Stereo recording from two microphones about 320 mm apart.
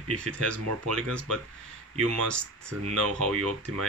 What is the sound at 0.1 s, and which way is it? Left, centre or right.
Speech, right.